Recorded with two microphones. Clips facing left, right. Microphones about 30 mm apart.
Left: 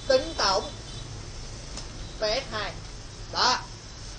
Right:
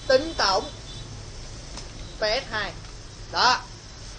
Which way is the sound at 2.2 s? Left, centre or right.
Right.